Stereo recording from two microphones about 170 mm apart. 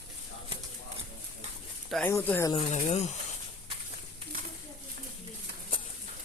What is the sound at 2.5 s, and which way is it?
Speech, 35° left (ahead or behind).